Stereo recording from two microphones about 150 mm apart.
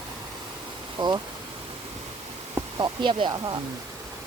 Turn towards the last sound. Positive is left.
turn(degrees=-30)  # may be behind; listen again after turning